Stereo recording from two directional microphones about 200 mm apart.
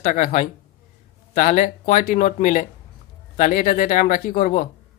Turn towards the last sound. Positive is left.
turn(degrees=45)  # may be behind; listen again after turning